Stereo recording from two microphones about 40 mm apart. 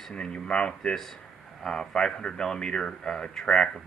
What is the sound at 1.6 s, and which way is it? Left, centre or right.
Speech, centre.